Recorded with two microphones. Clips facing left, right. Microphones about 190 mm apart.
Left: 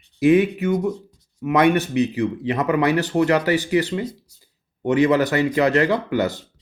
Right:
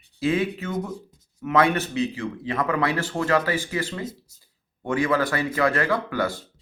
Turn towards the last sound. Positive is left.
turn(degrees=20)  # may be behind; listen again after turning